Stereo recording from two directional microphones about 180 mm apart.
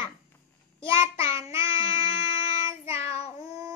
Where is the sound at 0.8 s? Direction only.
30° left (ahead or behind).